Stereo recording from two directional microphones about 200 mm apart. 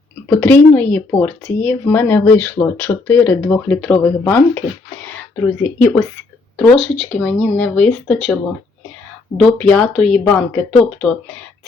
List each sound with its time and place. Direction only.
0.3 s speech: 10° left (ahead or behind)
6.6 s speech: 5° left (ahead or behind)
9.4 s speech: 5° left (ahead or behind)